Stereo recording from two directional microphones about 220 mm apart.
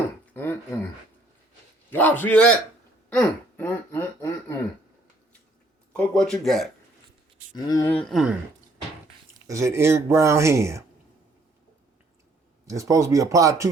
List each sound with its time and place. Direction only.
0.3 s a sound: 10° left (ahead or behind)
1.9 s a man's voice: 10° left (ahead or behind)
3.1 s a sound: 5° left (ahead or behind)
5.9 s speech: 5° left (ahead or behind)
7.5 s a man's voice: 15° left (ahead or behind)
8.0 s speech: centre (ahead or behind)
9.5 s speech: 15° right (ahead or behind)
12.6 s speech: 15° right (ahead or behind)